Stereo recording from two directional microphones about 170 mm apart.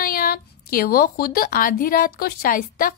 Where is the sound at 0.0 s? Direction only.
60° left (ahead or behind).